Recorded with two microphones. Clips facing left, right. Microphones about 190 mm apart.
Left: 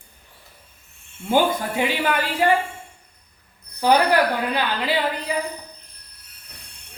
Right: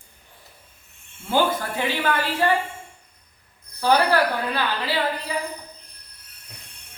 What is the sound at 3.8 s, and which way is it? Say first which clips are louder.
A woman's voice: left 2 dB; 15° left (ahead or behind).